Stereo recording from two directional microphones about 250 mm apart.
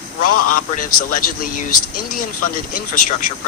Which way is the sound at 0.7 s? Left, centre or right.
Left.